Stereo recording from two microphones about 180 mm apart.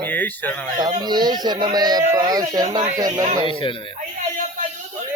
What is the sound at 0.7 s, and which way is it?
Speech, 25° right (ahead or behind).